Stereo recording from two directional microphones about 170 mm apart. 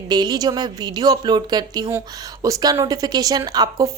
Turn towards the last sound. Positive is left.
turn(degrees=-20)  # may be behind; listen again after turning